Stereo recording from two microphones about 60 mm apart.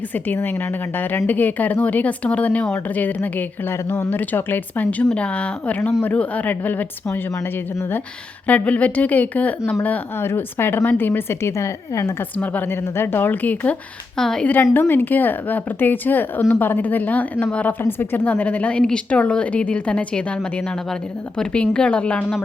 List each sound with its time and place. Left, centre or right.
0.9 s a woman's voice: left
8.4 s speech: left
10.2 s a woman's voice: left
12.7 s a woman's voice: left
14.2 s a woman's voice: centre
14.6 s a woman's voice: left
17.8 s speech: left
18.8 s a woman's voice: centre
21.3 s a woman's voice: centre